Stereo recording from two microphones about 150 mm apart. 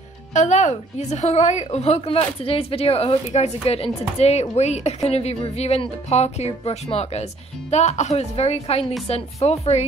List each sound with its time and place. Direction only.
0.3 s a woman's voice: 50° left (ahead or behind)